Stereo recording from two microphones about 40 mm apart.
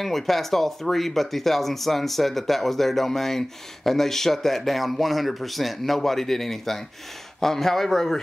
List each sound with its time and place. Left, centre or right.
0.0 s speech: centre